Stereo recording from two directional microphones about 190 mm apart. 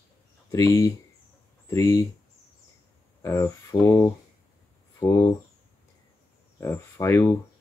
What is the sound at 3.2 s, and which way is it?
Speech, 15° left (ahead or behind).